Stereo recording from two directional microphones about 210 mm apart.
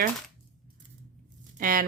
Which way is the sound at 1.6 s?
40° right (ahead or behind).